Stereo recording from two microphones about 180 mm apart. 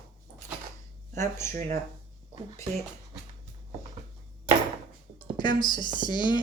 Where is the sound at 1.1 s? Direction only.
15° left (ahead or behind).